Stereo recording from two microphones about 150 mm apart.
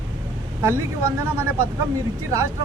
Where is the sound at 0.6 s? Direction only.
20° right (ahead or behind).